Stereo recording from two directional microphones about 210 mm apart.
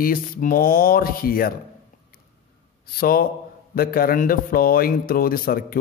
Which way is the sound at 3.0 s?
45° left (ahead or behind).